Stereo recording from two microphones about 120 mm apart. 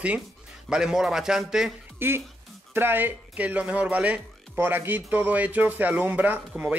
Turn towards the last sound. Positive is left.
turn(degrees=-10)  # may be behind; listen again after turning